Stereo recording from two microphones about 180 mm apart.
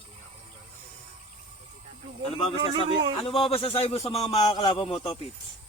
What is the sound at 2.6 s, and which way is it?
Speech, 25° right (ahead or behind).